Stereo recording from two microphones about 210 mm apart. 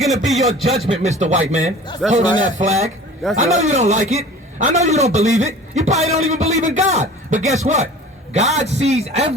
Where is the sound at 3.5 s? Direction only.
35° right (ahead or behind).